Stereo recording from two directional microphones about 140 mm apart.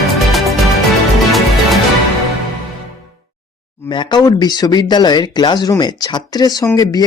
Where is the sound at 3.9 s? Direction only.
35° left (ahead or behind).